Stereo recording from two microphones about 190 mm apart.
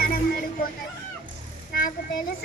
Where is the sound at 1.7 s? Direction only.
50° left (ahead or behind).